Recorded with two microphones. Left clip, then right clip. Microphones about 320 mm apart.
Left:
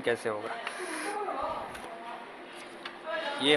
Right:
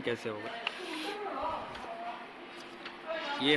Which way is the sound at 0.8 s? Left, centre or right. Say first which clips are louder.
Left 3 dB; centre.